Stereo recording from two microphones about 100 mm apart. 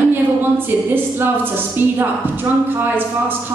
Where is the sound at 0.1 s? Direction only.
20° right (ahead or behind).